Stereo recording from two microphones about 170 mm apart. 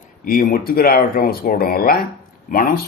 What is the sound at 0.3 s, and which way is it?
Speech, 60° left (ahead or behind).